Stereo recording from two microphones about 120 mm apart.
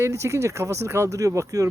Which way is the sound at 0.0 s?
25° right (ahead or behind).